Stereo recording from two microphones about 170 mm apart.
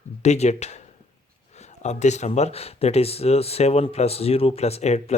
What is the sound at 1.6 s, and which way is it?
Speech, 40° left (ahead or behind).